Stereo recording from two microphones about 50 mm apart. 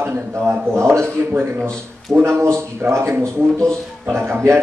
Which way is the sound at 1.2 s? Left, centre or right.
Right.